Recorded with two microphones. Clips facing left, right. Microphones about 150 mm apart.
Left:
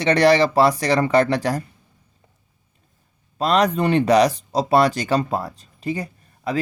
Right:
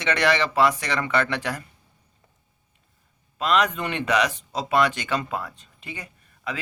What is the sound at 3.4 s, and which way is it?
Speech, 35° left (ahead or behind).